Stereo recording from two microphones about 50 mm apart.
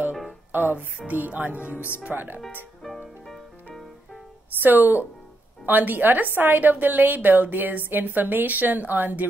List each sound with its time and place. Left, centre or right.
0.5 s a woman's voice: right
4.6 s a woman's voice: right